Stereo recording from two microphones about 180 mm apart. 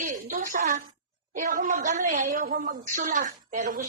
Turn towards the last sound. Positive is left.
turn(degrees=-50)  # may be behind; listen again after turning